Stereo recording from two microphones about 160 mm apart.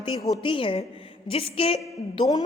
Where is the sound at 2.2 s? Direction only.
25° left (ahead or behind).